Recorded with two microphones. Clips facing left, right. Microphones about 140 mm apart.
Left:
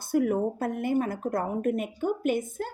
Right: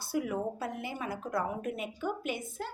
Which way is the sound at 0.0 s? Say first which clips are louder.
Left 8 dB; 50° left (ahead or behind).